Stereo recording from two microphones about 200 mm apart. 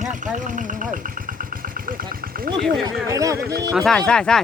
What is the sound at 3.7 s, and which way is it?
Speech, centre (ahead or behind).